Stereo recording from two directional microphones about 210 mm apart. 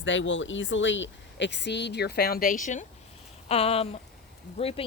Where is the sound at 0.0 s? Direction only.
60° left (ahead or behind).